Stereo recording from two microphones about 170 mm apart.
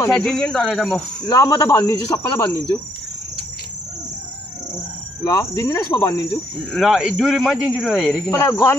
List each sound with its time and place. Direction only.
0.1 s speech: 5° left (ahead or behind)
1.2 s speech: 20° left (ahead or behind)
5.2 s speech: 15° left (ahead or behind)
6.7 s speech: centre (ahead or behind)
7.9 s speech: 10° left (ahead or behind)